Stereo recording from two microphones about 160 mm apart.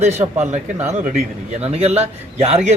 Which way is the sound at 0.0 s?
45° right (ahead or behind).